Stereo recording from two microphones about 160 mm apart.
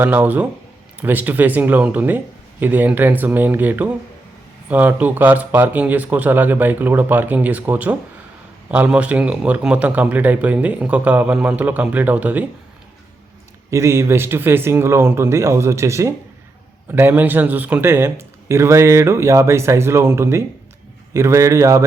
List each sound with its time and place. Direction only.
0.0 s speech: 10° right (ahead or behind)
13.7 s speech: 15° right (ahead or behind)